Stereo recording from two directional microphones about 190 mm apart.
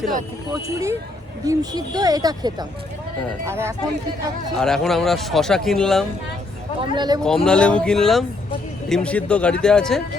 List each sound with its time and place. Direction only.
0.5 s speech: 15° right (ahead or behind)
4.5 s speech: centre (ahead or behind)
6.7 s speech: 25° right (ahead or behind)
7.2 s speech: 5° left (ahead or behind)